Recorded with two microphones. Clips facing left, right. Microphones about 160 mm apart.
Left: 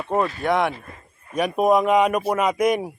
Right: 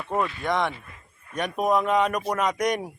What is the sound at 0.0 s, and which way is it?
Speech, 35° left (ahead or behind).